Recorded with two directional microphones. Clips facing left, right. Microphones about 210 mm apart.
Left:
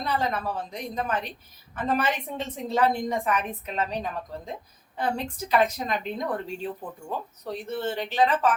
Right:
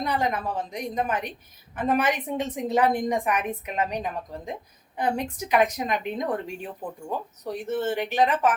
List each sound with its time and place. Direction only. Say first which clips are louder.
0.0 s a woman's voice: right 1 dB; 15° right (ahead or behind)